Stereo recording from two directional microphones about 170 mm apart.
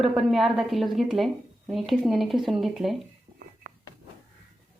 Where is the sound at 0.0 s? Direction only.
Centre (ahead or behind).